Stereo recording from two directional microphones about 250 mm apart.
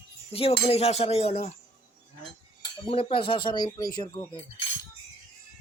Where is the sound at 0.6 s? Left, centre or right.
Left.